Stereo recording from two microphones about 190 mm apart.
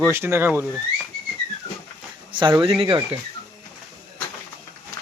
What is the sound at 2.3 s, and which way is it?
Speech, 25° right (ahead or behind).